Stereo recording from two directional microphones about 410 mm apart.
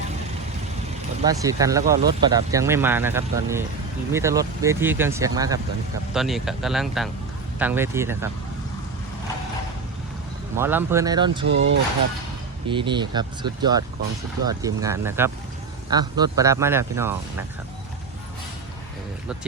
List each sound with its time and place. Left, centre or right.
1.2 s speech: centre
10.5 s speech: centre
11.4 s speech: right
12.6 s speech: centre